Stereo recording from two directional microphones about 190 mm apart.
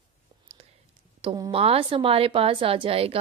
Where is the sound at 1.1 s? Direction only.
25° right (ahead or behind).